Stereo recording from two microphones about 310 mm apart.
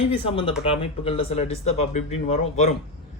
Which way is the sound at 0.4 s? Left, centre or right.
Centre.